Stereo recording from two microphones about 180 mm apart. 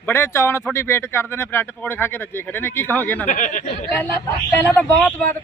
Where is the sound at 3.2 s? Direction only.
45° left (ahead or behind).